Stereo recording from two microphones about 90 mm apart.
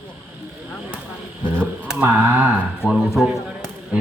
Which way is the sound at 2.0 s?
20° right (ahead or behind).